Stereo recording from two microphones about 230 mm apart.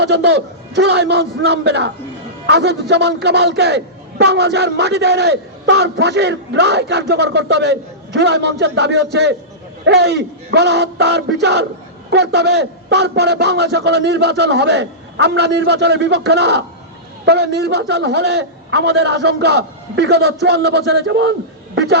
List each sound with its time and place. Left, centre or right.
0.0 s a man's voice: right